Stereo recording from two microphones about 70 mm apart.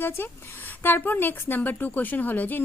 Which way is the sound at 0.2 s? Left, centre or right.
Left.